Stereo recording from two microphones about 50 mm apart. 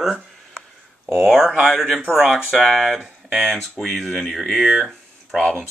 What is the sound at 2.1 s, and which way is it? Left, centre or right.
Speech, centre.